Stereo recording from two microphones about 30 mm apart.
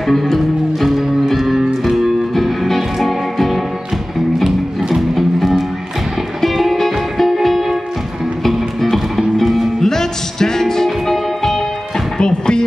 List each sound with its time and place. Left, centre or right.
0.0 s music: centre
0.8 s music: centre
5.1 s music: centre
8.5 s music: centre
9.8 s music: centre
12.2 s music: left